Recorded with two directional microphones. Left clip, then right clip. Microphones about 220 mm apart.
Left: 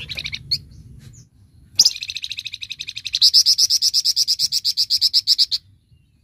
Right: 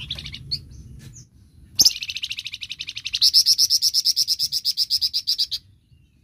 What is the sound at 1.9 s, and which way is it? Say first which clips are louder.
Bird: left 1 dB; 5° left (ahead or behind).